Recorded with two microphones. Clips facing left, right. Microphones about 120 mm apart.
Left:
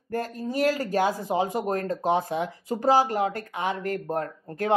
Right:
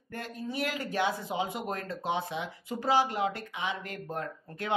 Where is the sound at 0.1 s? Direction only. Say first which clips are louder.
Left 8 dB; 40° left (ahead or behind).